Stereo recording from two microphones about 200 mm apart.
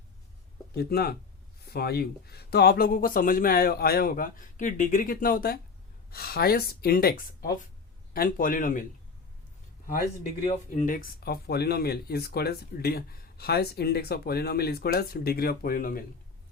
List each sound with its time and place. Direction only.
0.8 s speech: 50° left (ahead or behind)
10.4 s speech: 40° left (ahead or behind)